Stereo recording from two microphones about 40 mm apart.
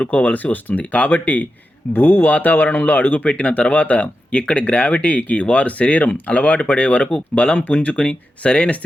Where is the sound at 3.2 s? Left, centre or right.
Left.